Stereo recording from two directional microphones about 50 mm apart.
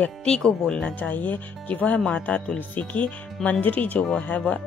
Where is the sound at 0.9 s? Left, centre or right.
Left.